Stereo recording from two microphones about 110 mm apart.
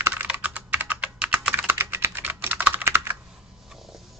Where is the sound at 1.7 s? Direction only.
20° right (ahead or behind).